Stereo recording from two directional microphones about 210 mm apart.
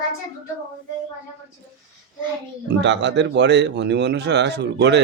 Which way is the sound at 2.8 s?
60° right (ahead or behind).